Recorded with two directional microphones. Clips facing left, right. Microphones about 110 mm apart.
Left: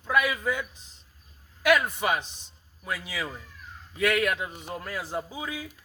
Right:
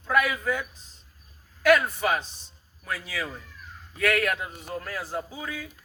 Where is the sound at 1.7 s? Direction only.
15° left (ahead or behind).